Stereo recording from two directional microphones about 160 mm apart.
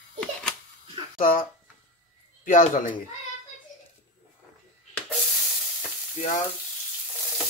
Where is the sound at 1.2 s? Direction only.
60° left (ahead or behind).